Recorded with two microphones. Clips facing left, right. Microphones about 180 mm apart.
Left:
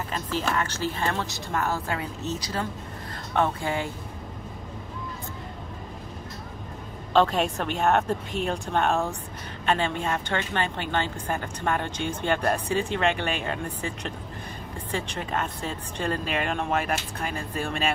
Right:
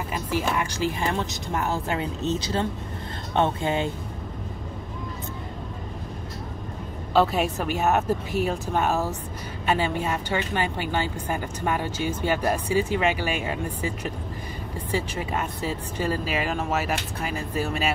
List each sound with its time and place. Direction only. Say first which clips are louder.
0.1 s a woman's voice: right 2 dB; 10° right (ahead or behind)
7.2 s a woman's voice: even; 5° right (ahead or behind)